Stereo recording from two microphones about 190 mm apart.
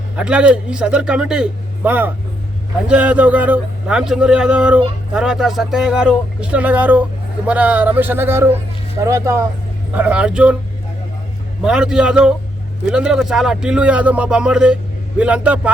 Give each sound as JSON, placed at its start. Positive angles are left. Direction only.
{"t": 0.2, "sound": "a man's voice", "side_deg": -5}
{"t": 11.6, "sound": "a man's voice", "side_deg": -5}